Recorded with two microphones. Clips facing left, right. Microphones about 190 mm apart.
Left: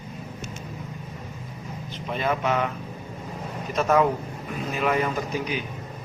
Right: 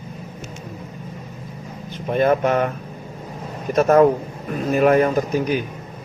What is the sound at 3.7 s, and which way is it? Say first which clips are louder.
Speech: right 7 dB; 50° right (ahead or behind).